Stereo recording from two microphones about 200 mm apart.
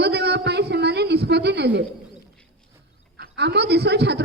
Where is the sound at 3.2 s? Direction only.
55° right (ahead or behind).